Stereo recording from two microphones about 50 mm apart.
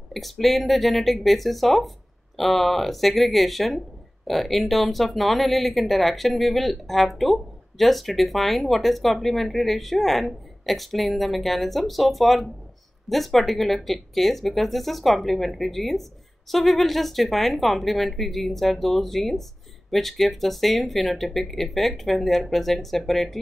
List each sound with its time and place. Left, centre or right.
0.1 s a woman's voice: centre